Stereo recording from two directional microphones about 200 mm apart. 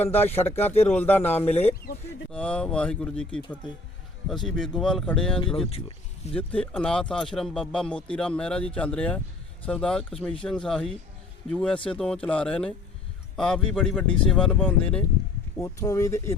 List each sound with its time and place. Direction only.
0.0 s speech: 10° left (ahead or behind)